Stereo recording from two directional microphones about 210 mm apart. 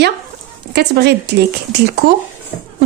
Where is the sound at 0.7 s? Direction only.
50° right (ahead or behind).